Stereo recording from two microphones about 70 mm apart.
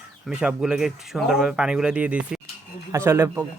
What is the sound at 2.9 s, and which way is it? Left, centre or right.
Speech, right.